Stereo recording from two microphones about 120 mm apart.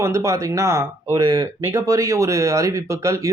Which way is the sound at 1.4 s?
25° right (ahead or behind).